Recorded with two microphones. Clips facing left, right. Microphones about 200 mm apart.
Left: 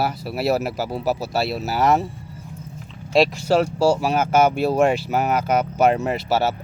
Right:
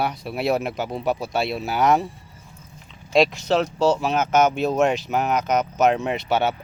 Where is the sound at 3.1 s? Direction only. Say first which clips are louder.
Left 1 dB; centre (ahead or behind).